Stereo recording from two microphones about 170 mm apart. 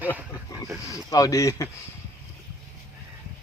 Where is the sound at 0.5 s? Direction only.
20° left (ahead or behind).